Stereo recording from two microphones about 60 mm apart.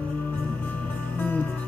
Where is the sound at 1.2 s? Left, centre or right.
Left.